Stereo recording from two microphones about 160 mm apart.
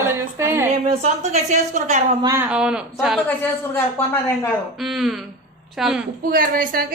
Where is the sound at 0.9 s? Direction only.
45° right (ahead or behind).